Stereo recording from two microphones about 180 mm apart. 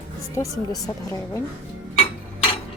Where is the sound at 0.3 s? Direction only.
20° left (ahead or behind).